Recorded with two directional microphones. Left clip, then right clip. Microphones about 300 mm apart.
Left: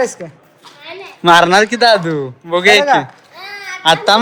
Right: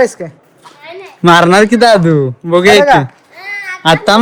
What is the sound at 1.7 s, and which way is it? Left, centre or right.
A man's voice, right.